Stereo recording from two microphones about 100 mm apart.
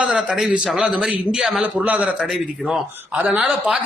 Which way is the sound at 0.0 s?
10° right (ahead or behind).